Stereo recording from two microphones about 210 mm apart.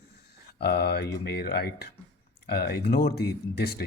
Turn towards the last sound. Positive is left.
turn(degrees=50)  # may be behind; listen again after turning